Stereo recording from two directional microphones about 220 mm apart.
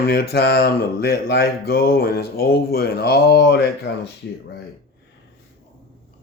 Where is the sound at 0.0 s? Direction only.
45° left (ahead or behind).